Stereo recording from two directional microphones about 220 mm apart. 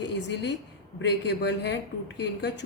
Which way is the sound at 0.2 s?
50° left (ahead or behind).